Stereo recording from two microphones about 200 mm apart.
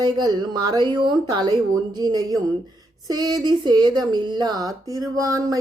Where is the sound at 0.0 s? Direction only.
20° right (ahead or behind).